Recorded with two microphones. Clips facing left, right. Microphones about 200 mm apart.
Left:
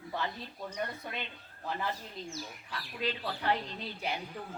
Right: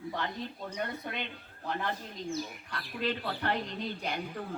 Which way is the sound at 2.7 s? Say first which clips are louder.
Right 3 dB; 60° right (ahead or behind).